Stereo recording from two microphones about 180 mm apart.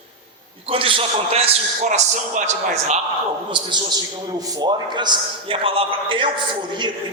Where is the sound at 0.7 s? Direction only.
30° right (ahead or behind).